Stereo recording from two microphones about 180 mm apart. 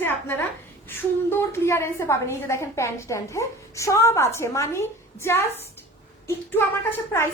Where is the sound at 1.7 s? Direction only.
15° left (ahead or behind).